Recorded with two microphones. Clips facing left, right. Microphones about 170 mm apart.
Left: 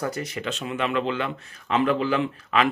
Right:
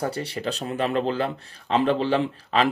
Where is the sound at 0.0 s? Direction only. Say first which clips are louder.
Right 1 dB; 30° right (ahead or behind).